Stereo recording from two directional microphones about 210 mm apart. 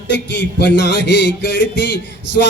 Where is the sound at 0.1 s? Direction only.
55° left (ahead or behind).